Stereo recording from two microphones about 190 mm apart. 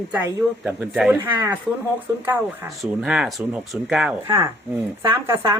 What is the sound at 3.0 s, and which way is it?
Speech, centre (ahead or behind).